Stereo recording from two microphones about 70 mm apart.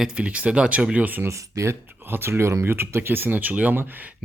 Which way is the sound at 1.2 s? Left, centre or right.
Right.